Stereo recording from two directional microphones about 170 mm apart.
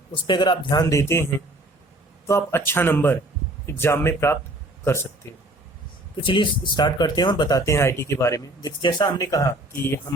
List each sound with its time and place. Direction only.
0.1 s speech: 25° left (ahead or behind)
6.2 s speech: 30° left (ahead or behind)